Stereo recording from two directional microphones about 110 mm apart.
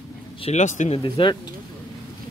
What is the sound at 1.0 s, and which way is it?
Speech, 45° left (ahead or behind).